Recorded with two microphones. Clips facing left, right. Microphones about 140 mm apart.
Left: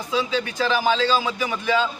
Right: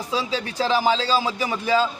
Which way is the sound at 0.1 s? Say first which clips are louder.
Left 3 dB; 35° right (ahead or behind).